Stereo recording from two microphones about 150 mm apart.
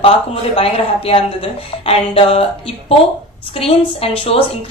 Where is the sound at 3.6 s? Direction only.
40° left (ahead or behind).